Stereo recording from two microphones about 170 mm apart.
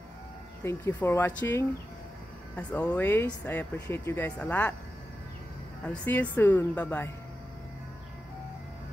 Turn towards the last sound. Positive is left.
turn(degrees=10)  # may be behind; listen again after turning